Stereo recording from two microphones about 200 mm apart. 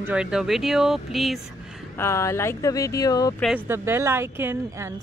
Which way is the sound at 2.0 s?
15° left (ahead or behind).